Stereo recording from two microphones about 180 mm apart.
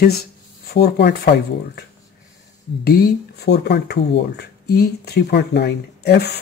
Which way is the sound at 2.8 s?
55° left (ahead or behind).